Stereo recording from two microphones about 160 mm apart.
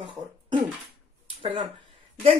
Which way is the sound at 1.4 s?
35° right (ahead or behind).